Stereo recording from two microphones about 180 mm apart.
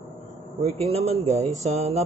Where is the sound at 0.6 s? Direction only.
35° right (ahead or behind).